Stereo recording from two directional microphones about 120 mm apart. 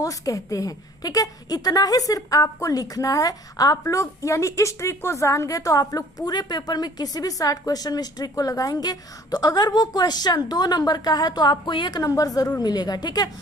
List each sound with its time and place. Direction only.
0.0 s a woman's voice: 30° left (ahead or behind)